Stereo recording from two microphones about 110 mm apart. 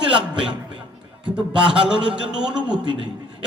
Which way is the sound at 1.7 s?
10° right (ahead or behind).